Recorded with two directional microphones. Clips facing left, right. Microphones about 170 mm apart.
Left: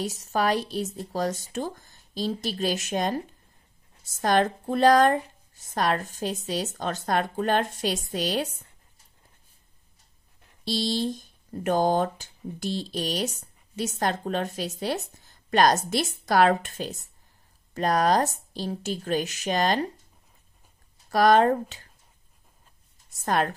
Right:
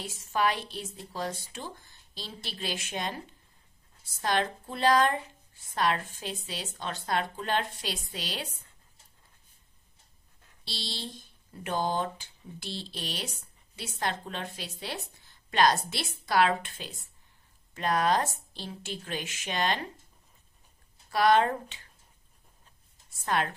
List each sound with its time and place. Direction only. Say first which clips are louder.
0.0 s a woman's voice: left 3 dB; 40° left (ahead or behind)
10.6 s a woman's voice: left 14 dB; 45° left (ahead or behind)
21.1 s speech: left 5 dB; 40° left (ahead or behind)
23.0 s a woman's voice: left 4 dB; 40° left (ahead or behind)